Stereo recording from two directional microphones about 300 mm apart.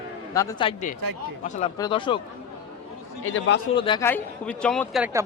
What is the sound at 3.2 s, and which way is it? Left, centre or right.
Speech, left.